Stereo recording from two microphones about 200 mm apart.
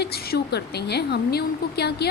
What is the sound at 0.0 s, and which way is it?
A woman's voice, 55° left (ahead or behind).